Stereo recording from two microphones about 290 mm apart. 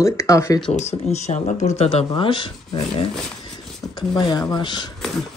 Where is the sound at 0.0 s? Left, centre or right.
Centre.